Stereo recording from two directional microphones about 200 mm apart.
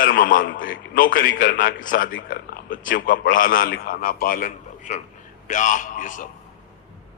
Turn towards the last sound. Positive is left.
turn(degrees=40)  # may be behind; listen again after turning